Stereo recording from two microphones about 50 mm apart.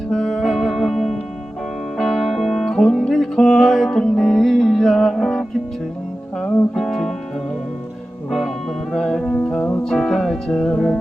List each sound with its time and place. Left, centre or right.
0.1 s music: centre
6.7 s music: centre
8.3 s music: centre
9.2 s music: centre